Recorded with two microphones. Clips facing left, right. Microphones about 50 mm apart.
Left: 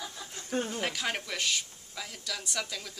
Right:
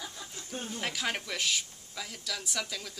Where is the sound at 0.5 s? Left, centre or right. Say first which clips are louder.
Left 7 dB; left.